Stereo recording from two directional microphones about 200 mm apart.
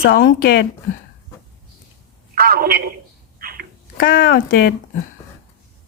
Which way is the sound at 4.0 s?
45° left (ahead or behind).